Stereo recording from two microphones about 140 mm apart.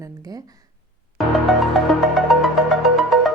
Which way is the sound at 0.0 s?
25° right (ahead or behind).